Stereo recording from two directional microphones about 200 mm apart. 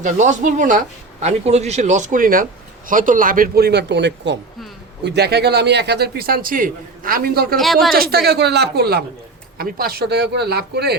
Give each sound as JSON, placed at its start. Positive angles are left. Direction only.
{"t": 0.0, "sound": "a man's voice", "side_deg": -40}
{"t": 7.5, "sound": "speech", "side_deg": 0}
{"t": 7.9, "sound": "a man's voice", "side_deg": -50}